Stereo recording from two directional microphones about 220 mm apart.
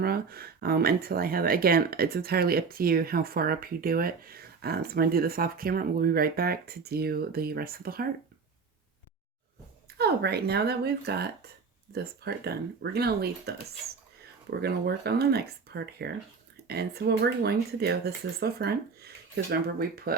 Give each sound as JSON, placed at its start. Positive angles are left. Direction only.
{"t": 0.0, "sound": "speech", "side_deg": -45}
{"t": 10.0, "sound": "speech", "side_deg": -45}